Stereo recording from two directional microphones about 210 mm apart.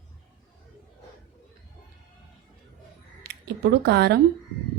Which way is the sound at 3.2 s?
50° right (ahead or behind).